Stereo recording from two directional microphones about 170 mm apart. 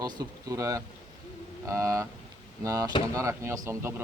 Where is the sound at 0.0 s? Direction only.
20° right (ahead or behind).